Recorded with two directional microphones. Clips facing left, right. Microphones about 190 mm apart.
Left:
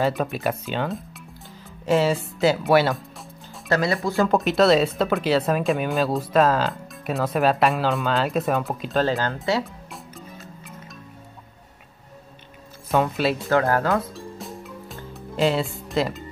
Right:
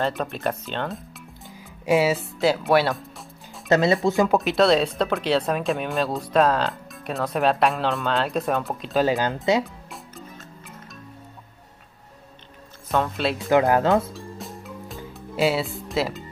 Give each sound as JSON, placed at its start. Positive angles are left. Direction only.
{"t": 0.0, "sound": "speech", "side_deg": 5}
{"t": 3.6, "sound": "speech", "side_deg": -20}
{"t": 4.3, "sound": "speech", "side_deg": 0}
{"t": 9.0, "sound": "speech", "side_deg": -15}
{"t": 9.8, "sound": "music", "side_deg": 0}
{"t": 13.0, "sound": "speech", "side_deg": 5}
{"t": 13.5, "sound": "speech", "side_deg": -15}
{"t": 14.1, "sound": "music", "side_deg": 0}